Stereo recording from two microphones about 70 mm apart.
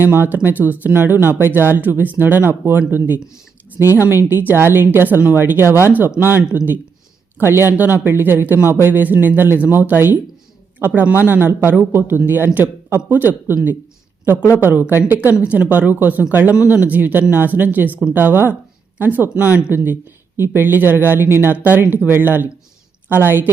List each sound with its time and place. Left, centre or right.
0.0 s a woman's voice: right
14.6 s speech: right